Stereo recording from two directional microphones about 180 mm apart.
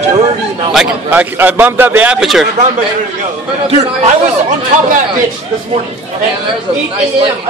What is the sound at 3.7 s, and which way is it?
Speech, 40° right (ahead or behind).